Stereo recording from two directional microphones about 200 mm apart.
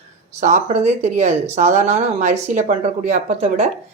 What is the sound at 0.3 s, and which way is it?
Speech, 35° right (ahead or behind).